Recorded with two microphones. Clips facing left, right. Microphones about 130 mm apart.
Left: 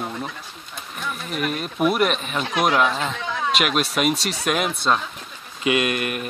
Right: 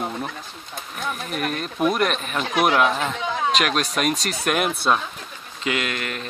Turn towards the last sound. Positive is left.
turn(degrees=15)  # may be behind; listen again after turning